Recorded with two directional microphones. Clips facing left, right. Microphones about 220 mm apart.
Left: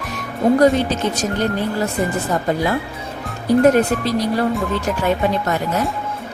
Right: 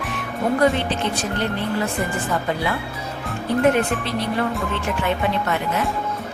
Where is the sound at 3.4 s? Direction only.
40° left (ahead or behind).